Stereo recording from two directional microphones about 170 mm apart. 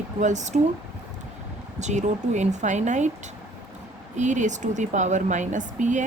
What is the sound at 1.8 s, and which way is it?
A woman's voice, 45° right (ahead or behind).